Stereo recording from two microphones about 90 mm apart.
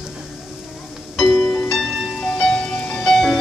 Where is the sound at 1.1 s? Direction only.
5° left (ahead or behind).